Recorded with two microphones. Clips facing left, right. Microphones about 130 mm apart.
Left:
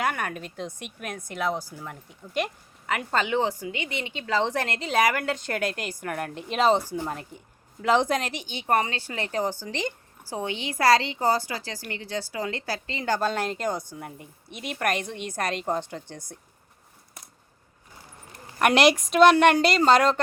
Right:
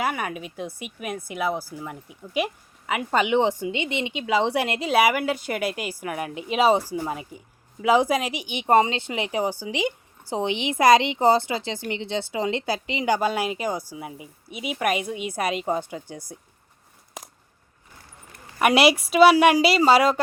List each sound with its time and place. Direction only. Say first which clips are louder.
0.0 s speech: right 1 dB; 5° right (ahead or behind)
17.2 s a sound: right 10 dB; 90° right
18.6 s a woman's voice: right 1 dB; 5° right (ahead or behind)